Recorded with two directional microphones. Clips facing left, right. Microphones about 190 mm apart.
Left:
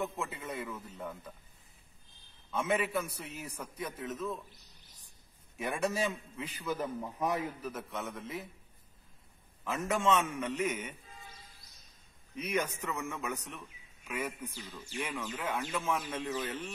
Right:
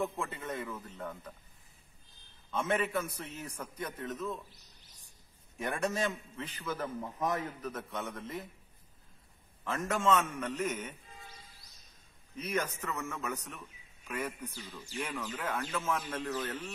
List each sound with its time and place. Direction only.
0.0 s a man's voice: 5° left (ahead or behind)
2.5 s a man's voice: 10° left (ahead or behind)
5.6 s a man's voice: 10° left (ahead or behind)
9.7 s a man's voice: 10° left (ahead or behind)
12.4 s a man's voice: 10° left (ahead or behind)